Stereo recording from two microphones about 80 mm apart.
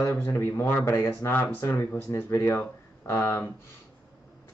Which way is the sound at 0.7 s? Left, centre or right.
Left.